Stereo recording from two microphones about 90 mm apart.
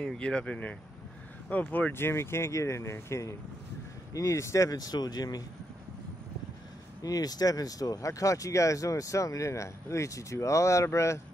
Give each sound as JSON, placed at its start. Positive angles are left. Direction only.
{"t": 0.0, "sound": "speech", "side_deg": 10}
{"t": 7.0, "sound": "speech", "side_deg": 45}